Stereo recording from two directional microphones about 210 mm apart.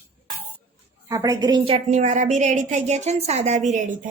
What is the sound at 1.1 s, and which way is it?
A woman's voice, 15° right (ahead or behind).